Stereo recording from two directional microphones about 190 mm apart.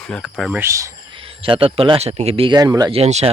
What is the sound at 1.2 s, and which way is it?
Speech, 30° right (ahead or behind).